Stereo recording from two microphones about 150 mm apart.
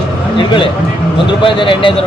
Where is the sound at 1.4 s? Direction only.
35° left (ahead or behind).